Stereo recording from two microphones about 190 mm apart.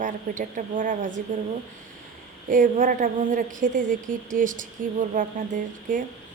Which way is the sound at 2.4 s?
45° right (ahead or behind).